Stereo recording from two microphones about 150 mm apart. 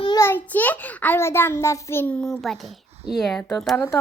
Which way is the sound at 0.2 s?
15° left (ahead or behind).